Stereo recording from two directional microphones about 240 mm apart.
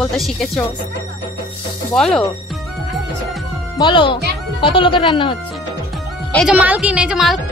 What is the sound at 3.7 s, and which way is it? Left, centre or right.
Speech, centre.